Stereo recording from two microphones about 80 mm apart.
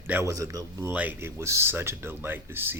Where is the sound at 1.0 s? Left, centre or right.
Right.